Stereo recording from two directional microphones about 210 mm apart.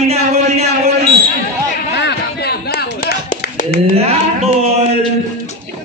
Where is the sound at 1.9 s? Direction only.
50° left (ahead or behind).